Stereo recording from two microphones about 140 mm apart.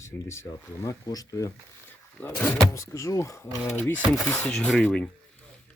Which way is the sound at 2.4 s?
15° left (ahead or behind).